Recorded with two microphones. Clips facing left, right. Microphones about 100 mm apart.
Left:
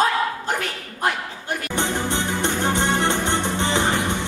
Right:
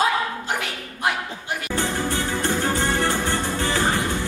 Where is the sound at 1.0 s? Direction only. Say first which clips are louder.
Left 1 dB; centre (ahead or behind).